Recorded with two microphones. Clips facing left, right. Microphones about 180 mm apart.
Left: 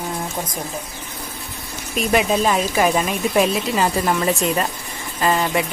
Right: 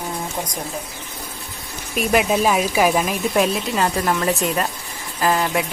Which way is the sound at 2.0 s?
5° right (ahead or behind).